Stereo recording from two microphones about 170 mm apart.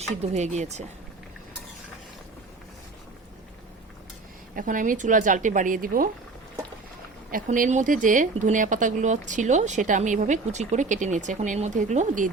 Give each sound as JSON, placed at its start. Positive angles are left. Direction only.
{"t": 0.2, "sound": "speech", "side_deg": -40}
{"t": 4.5, "sound": "speech", "side_deg": -50}
{"t": 7.3, "sound": "speech", "side_deg": -55}